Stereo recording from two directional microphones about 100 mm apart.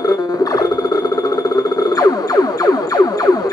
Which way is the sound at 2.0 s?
40° left (ahead or behind).